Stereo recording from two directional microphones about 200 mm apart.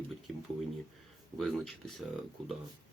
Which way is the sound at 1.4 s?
Centre (ahead or behind).